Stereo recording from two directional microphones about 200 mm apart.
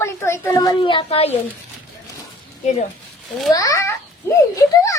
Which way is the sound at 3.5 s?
15° left (ahead or behind).